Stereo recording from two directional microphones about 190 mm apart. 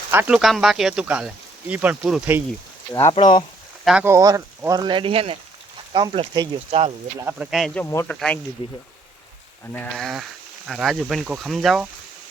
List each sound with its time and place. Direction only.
0.1 s speech: 10° right (ahead or behind)
3.1 s speech: 25° left (ahead or behind)
3.8 s speech: 10° right (ahead or behind); by 6.9 s 30° right (ahead or behind)
7.3 s speech: 5° right (ahead or behind)
9.7 s speech: 5° left (ahead or behind)